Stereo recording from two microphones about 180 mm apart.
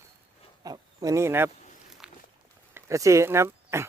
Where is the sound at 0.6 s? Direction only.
20° right (ahead or behind).